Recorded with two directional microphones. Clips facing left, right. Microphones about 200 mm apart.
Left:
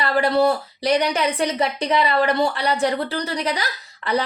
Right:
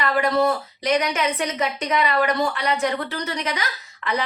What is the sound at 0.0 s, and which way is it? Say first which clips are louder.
A woman's voice: left 2 dB; 35° left (ahead or behind).